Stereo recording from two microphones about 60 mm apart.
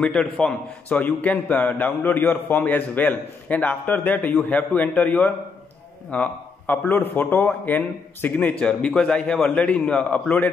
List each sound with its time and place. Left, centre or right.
0.0 s a man's voice: centre
8.5 s a man's voice: centre